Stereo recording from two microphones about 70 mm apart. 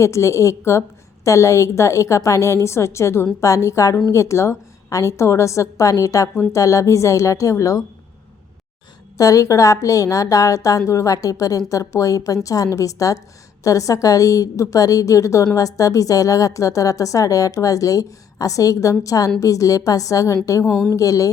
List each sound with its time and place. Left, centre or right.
0.0 s a woman's voice: left
9.1 s a woman's voice: left